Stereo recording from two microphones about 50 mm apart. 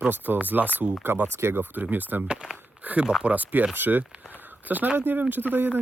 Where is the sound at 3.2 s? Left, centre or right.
Right.